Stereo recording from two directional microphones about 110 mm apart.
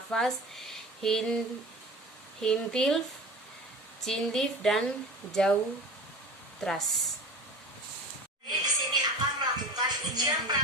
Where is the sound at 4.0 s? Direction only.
5° left (ahead or behind).